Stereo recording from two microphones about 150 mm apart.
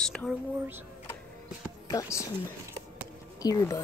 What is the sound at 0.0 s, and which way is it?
Music, 5° left (ahead or behind).